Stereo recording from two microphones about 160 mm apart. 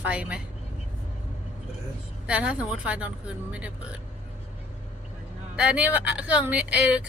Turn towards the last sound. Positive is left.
turn(degrees=-10)  # may be behind; listen again after turning